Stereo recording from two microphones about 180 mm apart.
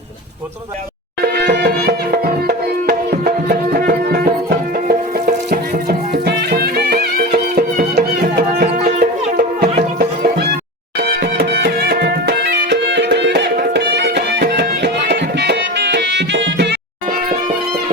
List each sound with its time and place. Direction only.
1.2 s music: 65° right (ahead or behind)